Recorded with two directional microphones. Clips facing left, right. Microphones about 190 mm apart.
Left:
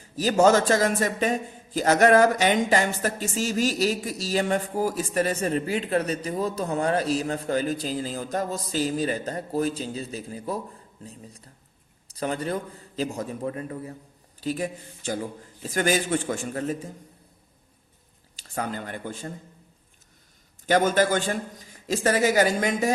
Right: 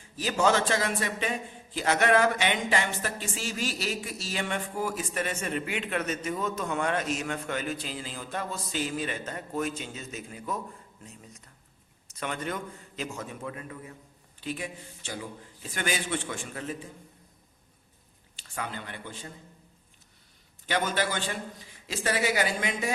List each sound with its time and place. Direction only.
0.0 s a man's voice: 40° left (ahead or behind)
18.3 s speech: 40° left (ahead or behind)
20.7 s a man's voice: 45° left (ahead or behind)